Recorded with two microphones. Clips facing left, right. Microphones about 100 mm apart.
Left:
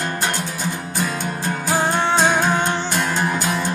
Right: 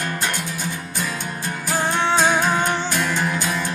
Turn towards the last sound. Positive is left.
turn(degrees=25)  # may be behind; listen again after turning